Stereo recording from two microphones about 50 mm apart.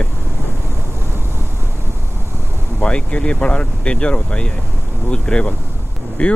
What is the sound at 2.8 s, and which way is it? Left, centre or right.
Speech, left.